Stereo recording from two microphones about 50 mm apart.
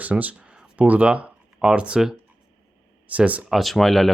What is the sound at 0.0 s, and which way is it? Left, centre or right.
Speech, right.